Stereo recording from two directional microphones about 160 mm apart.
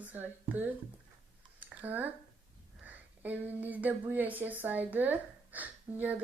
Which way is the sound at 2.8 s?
10° right (ahead or behind).